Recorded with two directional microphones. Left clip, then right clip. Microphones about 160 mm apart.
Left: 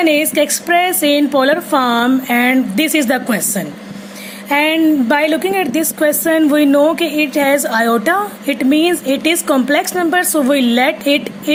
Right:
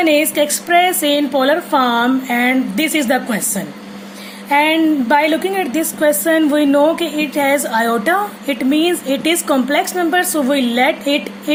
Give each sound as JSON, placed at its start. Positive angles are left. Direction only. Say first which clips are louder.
{"t": 0.0, "sound": "a woman's voice", "louder": "left 1 dB", "side_deg": 35}